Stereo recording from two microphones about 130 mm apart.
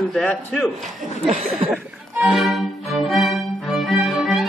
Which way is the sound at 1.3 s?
55° right (ahead or behind).